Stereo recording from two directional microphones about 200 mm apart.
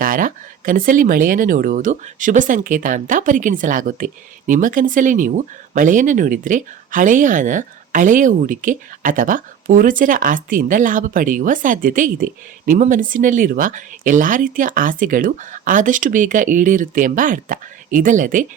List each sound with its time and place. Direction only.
0.0 s speech: 45° right (ahead or behind)